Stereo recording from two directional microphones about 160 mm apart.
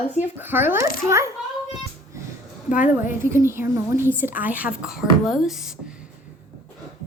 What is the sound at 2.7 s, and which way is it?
Speech, 55° left (ahead or behind).